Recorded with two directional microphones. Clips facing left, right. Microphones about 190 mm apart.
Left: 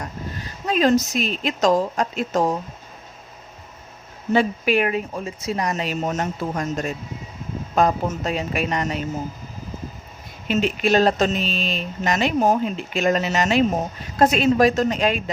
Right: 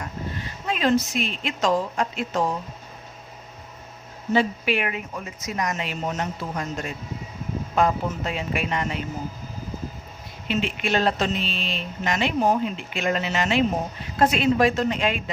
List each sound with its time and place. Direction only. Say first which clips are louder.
0.7 s speech: left 4 dB; 40° left (ahead or behind)
4.3 s speech: left 3 dB; 50° left (ahead or behind)
10.5 s speech: left 5 dB; 40° left (ahead or behind)